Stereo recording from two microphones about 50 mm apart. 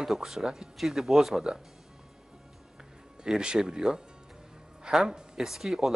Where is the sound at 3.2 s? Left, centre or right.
Centre.